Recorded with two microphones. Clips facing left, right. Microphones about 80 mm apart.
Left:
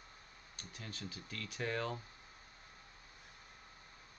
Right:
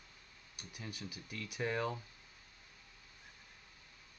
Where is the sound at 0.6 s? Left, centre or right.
Centre.